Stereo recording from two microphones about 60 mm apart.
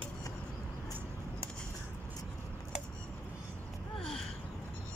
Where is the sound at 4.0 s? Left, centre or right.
Centre.